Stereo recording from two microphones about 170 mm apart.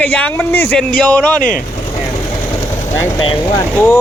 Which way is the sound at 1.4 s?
55° left (ahead or behind).